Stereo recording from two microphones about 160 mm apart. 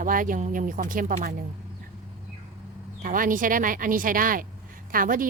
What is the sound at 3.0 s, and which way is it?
Speech, 60° right (ahead or behind).